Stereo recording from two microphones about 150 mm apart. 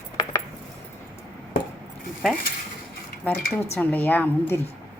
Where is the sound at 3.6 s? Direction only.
15° left (ahead or behind).